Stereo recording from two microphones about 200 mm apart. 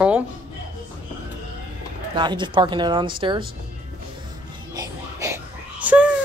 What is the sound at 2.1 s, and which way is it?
Speech, 25° right (ahead or behind).